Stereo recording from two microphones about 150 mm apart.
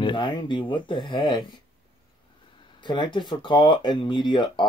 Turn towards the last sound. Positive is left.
turn(degrees=30)  # may be behind; listen again after turning